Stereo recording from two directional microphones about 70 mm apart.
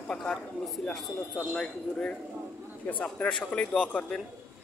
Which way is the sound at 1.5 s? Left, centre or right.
Centre.